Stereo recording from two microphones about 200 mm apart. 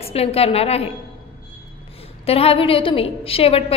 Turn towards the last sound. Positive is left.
turn(degrees=30)  # may be behind; listen again after turning